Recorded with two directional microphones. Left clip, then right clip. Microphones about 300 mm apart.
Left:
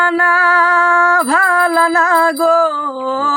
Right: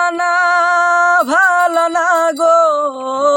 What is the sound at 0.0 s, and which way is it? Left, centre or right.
Music, centre.